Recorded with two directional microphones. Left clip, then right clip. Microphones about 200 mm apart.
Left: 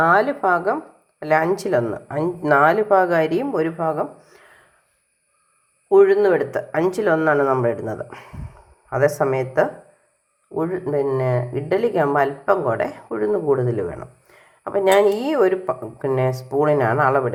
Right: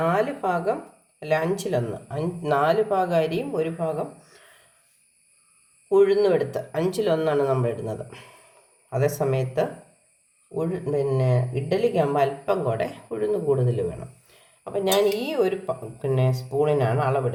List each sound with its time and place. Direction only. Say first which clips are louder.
0.2 s speech: left 6 dB; 20° left (ahead or behind)
5.9 s speech: left 5 dB; 15° left (ahead or behind)
10.5 s speech: left 4 dB; 20° left (ahead or behind)